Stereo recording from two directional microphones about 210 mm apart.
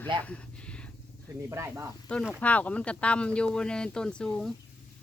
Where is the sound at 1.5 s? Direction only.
15° right (ahead or behind).